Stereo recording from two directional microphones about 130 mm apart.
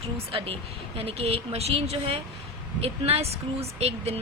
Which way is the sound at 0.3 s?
45° right (ahead or behind).